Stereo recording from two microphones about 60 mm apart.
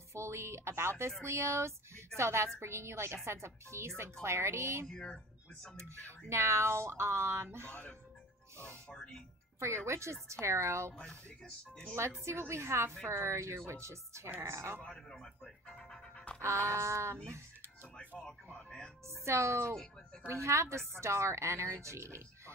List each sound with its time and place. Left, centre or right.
0.1 s speech: right
1.2 s a sound: right
2.1 s a woman's voice: right
4.8 s speech: centre
5.8 s a woman's voice: right
9.8 s a woman's voice: right
11.1 s speech: centre
12.3 s a woman's voice: right
15.0 s speech: centre
16.3 s a woman's voice: right
18.2 s speech: centre
19.0 s a woman's voice: right